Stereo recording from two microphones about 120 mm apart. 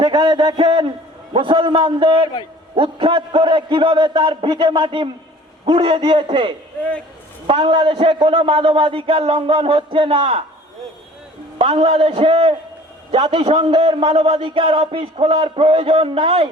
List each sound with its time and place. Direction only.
0.0 s a man's voice: 40° right (ahead or behind)
11.5 s a man's voice: 50° right (ahead or behind)